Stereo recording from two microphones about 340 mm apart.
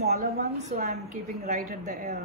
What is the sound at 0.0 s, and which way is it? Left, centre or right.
A woman's voice, right.